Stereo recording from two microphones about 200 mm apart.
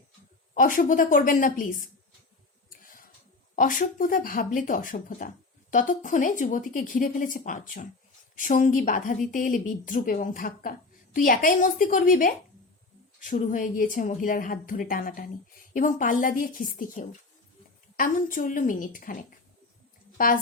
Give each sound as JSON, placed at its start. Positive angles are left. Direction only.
{"t": 0.5, "sound": "a woman's voice", "side_deg": 40}
{"t": 2.6, "sound": "tick", "side_deg": 45}
{"t": 3.5, "sound": "a woman's voice", "side_deg": 40}